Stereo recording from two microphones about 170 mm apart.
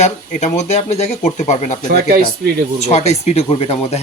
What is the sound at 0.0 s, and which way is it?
Speech, 40° left (ahead or behind).